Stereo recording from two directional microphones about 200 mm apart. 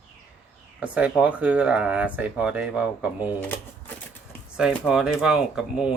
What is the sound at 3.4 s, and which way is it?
Speech, 10° left (ahead or behind).